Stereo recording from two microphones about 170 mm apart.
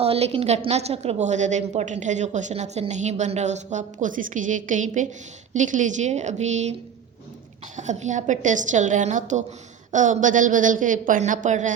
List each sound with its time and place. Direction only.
0.0 s a woman's voice: 35° right (ahead or behind)
7.8 s a woman's voice: 45° right (ahead or behind)